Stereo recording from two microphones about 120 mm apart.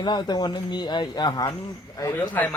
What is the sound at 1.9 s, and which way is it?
Speech, 20° left (ahead or behind).